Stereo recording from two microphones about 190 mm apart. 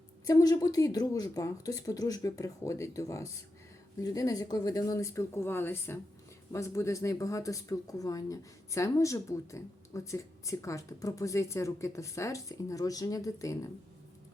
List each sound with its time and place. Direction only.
0.3 s speech: 15° left (ahead or behind)